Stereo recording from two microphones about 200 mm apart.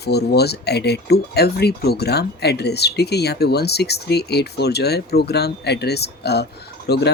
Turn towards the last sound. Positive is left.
turn(degrees=55)  # may be behind; listen again after turning